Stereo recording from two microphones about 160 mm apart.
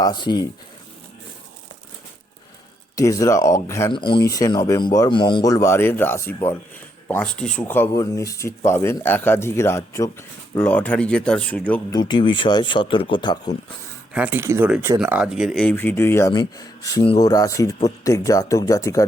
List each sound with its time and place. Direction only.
0.0 s speech: 25° left (ahead or behind)
2.9 s speech: 20° left (ahead or behind)
3.9 s speech: 30° left (ahead or behind); by 11.8 s 10° left (ahead or behind)
11.9 s speech: 25° left (ahead or behind)
14.1 s speech: 10° right (ahead or behind); by 19.0 s 20° left (ahead or behind)